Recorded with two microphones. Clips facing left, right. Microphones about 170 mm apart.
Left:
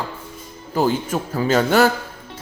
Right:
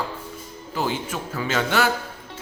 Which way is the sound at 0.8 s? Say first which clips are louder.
Left 7 dB; 40° left (ahead or behind).